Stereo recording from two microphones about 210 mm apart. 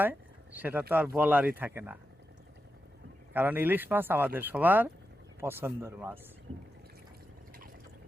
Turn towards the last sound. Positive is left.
turn(degrees=-10)  # may be behind; listen again after turning